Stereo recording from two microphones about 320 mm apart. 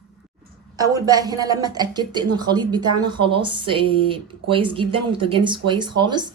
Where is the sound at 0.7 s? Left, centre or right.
Centre.